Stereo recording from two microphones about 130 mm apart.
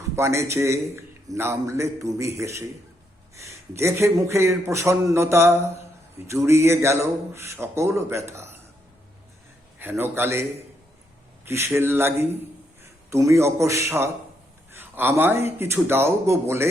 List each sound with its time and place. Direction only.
0.2 s a man's voice: 20° right (ahead or behind)
10.0 s a man's voice: 20° right (ahead or behind)
11.4 s a man's voice: 20° right (ahead or behind)